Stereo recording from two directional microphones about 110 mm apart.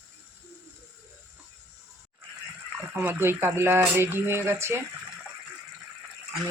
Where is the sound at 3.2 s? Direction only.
20° right (ahead or behind).